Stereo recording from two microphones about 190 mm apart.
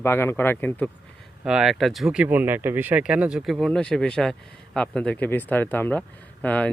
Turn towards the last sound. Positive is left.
turn(degrees=5)  # may be behind; listen again after turning